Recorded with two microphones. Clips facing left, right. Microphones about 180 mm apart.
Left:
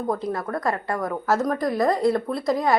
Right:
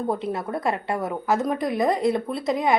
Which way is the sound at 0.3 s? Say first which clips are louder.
Even; 25° right (ahead or behind).